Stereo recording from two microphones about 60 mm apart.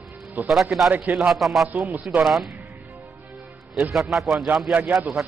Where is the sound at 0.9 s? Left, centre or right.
Right.